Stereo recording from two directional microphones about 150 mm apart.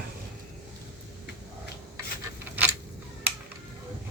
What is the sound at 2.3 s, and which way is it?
Coin, 10° right (ahead or behind).